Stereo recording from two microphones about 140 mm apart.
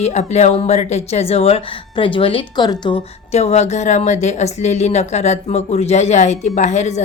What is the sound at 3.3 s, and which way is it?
A woman's voice, 50° left (ahead or behind).